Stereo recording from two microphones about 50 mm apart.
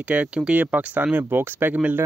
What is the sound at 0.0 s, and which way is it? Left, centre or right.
Speech, right.